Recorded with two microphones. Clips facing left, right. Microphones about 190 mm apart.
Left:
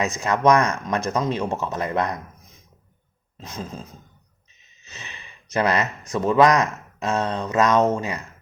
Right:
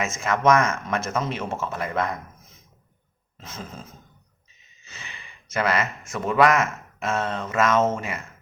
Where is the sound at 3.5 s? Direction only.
15° left (ahead or behind).